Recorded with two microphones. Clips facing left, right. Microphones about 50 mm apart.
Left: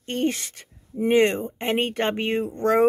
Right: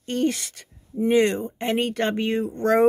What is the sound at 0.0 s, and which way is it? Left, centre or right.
Speech, left.